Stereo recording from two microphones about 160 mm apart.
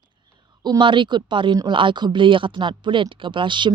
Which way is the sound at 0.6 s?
30° right (ahead or behind).